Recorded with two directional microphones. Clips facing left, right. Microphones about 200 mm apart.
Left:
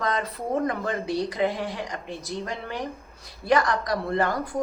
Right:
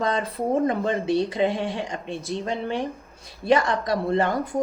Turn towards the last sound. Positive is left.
turn(degrees=-25)  # may be behind; listen again after turning